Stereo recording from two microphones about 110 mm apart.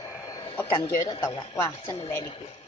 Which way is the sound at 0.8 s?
45° left (ahead or behind).